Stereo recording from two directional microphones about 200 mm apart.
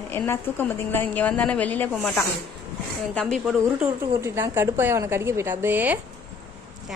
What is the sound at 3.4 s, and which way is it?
A woman's voice, 10° right (ahead or behind).